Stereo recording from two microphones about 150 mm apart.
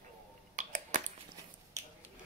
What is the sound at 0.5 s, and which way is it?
Finger snapping, 55° right (ahead or behind).